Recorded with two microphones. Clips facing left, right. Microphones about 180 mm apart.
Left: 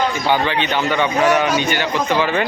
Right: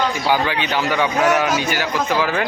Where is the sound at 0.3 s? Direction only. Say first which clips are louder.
Left 1 dB; 5° right (ahead or behind).